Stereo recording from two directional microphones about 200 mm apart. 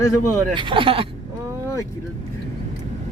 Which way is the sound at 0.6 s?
25° right (ahead or behind).